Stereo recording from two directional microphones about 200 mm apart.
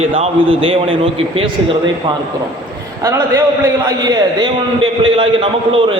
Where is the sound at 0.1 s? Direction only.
25° right (ahead or behind).